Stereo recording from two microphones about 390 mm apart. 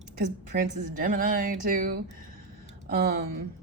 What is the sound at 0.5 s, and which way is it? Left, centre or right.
A woman's voice, right.